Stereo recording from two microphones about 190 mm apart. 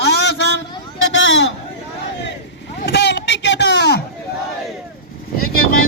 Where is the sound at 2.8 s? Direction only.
65° left (ahead or behind).